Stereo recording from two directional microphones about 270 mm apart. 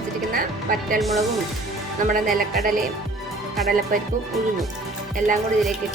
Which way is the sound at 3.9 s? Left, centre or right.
Right.